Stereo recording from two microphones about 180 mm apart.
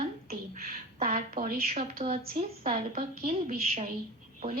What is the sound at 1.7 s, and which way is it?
A woman's voice, 40° right (ahead or behind).